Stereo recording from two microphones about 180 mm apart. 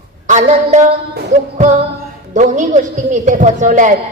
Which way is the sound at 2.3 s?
45° right (ahead or behind).